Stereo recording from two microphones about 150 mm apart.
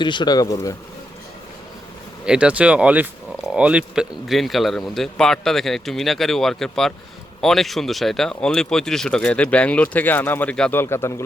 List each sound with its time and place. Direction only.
0.0 s speech: 30° left (ahead or behind)
2.2 s speech: 5° right (ahead or behind); by 11.1 s 15° left (ahead or behind)